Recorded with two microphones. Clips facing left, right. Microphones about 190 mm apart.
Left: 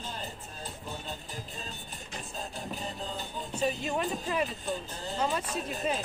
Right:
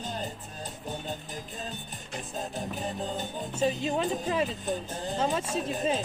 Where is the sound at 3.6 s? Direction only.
25° right (ahead or behind).